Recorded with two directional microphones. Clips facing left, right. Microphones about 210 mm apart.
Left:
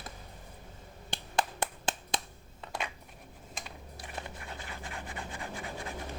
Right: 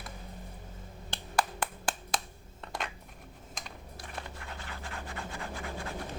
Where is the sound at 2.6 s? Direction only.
5° left (ahead or behind).